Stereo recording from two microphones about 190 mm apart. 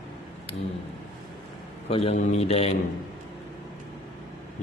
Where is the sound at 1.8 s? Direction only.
30° left (ahead or behind).